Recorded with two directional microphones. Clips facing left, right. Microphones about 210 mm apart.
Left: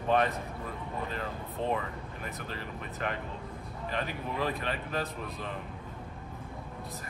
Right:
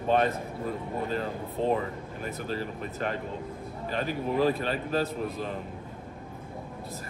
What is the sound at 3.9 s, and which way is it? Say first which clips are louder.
Speech: right 6 dB; 35° right (ahead or behind).